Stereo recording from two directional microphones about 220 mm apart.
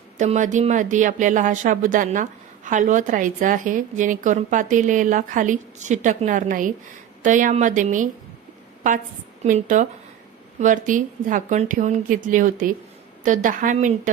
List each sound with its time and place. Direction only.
0.2 s a woman's voice: 35° right (ahead or behind)
9.4 s a woman's voice: 35° right (ahead or behind)